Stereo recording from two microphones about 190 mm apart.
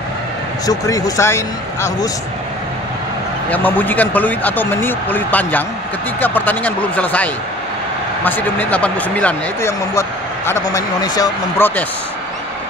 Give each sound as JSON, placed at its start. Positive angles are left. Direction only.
{"t": 0.7, "sound": "speech", "side_deg": 20}
{"t": 3.4, "sound": "speech", "side_deg": 10}